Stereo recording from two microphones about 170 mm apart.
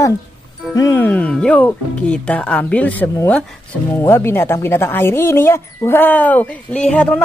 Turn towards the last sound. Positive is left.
turn(degrees=5)  # may be behind; listen again after turning